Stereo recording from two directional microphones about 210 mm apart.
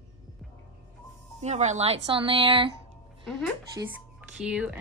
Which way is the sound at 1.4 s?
30° right (ahead or behind).